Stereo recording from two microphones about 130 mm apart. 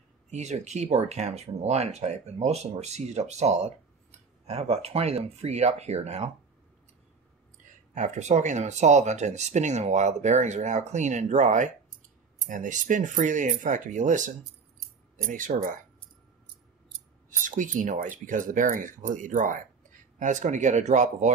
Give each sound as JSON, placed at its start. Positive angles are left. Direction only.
{"t": 0.3, "sound": "speech", "side_deg": -60}
{"t": 7.9, "sound": "speech", "side_deg": -65}
{"t": 12.4, "sound": "speech", "side_deg": -80}
{"t": 15.2, "sound": "speech", "side_deg": -90}
{"t": 17.5, "sound": "speech", "side_deg": -80}